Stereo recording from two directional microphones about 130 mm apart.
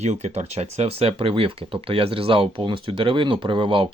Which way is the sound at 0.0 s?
60° right (ahead or behind).